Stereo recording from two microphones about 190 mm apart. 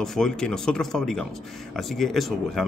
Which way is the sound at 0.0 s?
Centre (ahead or behind).